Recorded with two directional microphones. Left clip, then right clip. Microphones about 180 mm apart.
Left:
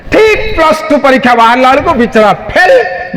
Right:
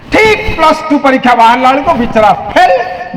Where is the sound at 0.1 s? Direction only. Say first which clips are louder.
Left 1 dB; 60° left (ahead or behind).